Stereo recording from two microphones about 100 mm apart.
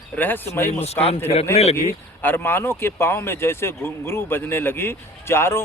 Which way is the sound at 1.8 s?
20° left (ahead or behind).